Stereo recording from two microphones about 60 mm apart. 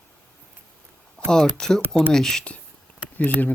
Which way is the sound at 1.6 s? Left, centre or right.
Centre.